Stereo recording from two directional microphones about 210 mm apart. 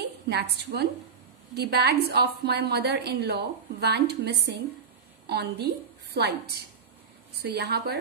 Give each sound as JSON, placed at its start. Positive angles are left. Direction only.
{"t": 0.3, "sound": "a woman's voice", "side_deg": -50}